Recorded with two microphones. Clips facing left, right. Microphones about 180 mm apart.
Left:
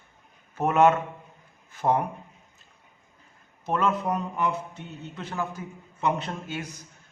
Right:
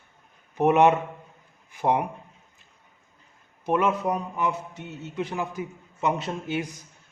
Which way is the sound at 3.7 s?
15° right (ahead or behind).